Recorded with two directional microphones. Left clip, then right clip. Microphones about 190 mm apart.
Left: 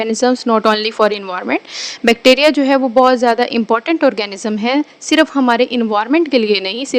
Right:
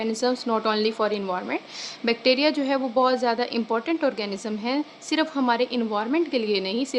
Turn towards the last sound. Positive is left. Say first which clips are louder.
# left 10 dB
turn(degrees=40)  # may be behind; listen again after turning